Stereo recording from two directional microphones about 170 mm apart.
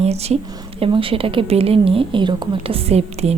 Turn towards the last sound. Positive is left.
turn(degrees=-35)  # may be behind; listen again after turning